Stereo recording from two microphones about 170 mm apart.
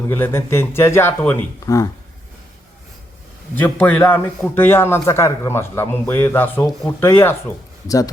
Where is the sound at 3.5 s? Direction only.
10° left (ahead or behind).